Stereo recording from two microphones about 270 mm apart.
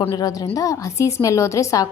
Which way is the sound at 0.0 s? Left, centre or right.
Centre.